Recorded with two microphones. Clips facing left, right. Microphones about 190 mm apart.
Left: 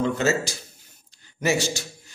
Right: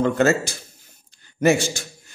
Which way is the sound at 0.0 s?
55° right (ahead or behind).